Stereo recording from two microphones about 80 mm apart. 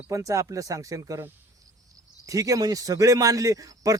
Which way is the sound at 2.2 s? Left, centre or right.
Right.